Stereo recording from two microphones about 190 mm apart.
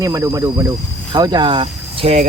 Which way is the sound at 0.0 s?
15° right (ahead or behind).